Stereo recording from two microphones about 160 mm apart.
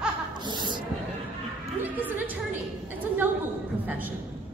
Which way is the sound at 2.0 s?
10° right (ahead or behind).